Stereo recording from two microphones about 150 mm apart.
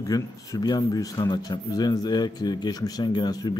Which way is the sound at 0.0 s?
25° left (ahead or behind).